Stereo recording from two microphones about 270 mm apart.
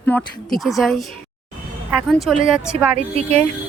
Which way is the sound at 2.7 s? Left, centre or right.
Right.